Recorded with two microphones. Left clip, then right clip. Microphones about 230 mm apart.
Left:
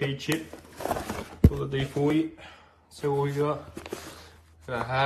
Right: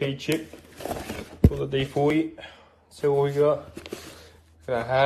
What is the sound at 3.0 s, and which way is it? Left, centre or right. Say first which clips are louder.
Speech: right 6 dB; left.